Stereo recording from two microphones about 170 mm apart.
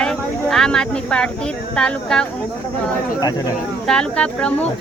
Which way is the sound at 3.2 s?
20° left (ahead or behind).